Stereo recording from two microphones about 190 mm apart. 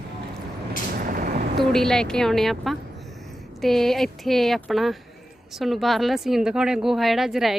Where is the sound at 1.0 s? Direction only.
50° right (ahead or behind).